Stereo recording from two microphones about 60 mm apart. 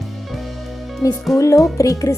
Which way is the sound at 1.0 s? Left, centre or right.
Left.